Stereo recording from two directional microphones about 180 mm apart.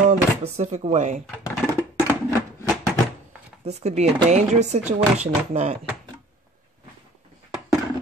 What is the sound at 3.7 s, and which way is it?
Speech, 35° right (ahead or behind).